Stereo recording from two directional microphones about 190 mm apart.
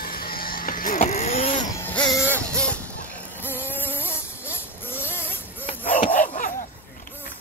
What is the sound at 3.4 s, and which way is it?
Music, 10° left (ahead or behind).